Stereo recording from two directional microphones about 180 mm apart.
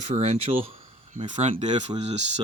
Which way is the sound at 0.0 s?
40° right (ahead or behind).